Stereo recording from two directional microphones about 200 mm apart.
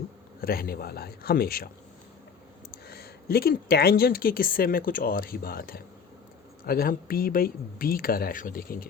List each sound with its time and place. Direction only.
0.4 s speech: 50° left (ahead or behind)
2.7 s speech: 50° left (ahead or behind)